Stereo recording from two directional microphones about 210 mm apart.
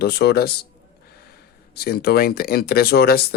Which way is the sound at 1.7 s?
50° left (ahead or behind).